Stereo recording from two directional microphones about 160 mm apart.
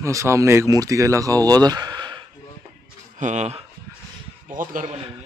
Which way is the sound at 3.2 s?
45° right (ahead or behind).